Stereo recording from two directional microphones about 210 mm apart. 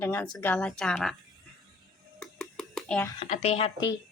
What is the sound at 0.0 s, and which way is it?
A woman's voice, 10° left (ahead or behind).